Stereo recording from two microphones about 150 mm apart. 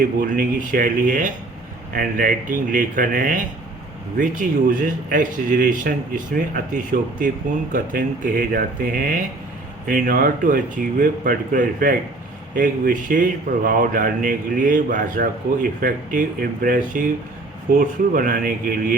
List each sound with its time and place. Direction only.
0.0 s speech: 65° right (ahead or behind)